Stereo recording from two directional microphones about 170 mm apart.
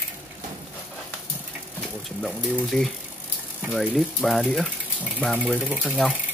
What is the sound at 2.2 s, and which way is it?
Speech, centre (ahead or behind).